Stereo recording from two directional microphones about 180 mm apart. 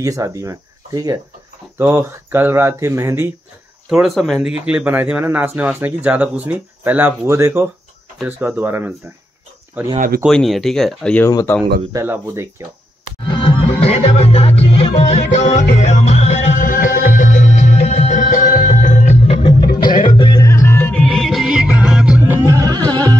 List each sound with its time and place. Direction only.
0.0 s speech: 15° right (ahead or behind)
3.9 s speech: centre (ahead or behind)
9.9 s speech: 50° right (ahead or behind)
10.2 s speech: centre (ahead or behind)
11.2 s speech: 15° left (ahead or behind)
11.9 s speech: 15° right (ahead or behind)
13.3 s music: 30° left (ahead or behind)
20.1 s music: 20° left (ahead or behind)
21.0 s music: centre (ahead or behind); by 23.1 s 20° right (ahead or behind)